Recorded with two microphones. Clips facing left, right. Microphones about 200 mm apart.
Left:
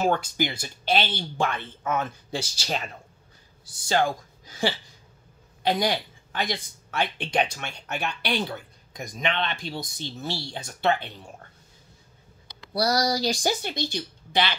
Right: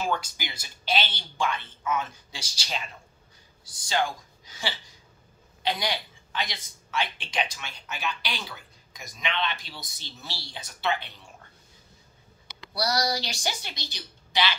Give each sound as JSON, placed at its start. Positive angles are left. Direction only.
{"t": 0.1, "sound": "speech", "side_deg": 55}
{"t": 3.9, "sound": "speech", "side_deg": 50}
{"t": 12.8, "sound": "speech", "side_deg": 40}